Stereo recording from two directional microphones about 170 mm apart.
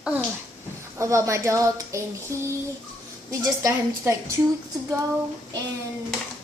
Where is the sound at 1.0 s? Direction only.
15° right (ahead or behind).